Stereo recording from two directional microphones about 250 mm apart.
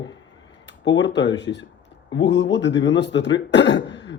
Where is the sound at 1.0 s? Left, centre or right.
Left.